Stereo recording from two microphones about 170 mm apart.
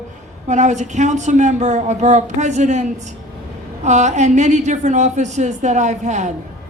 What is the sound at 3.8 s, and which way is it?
Speech, 45° right (ahead or behind).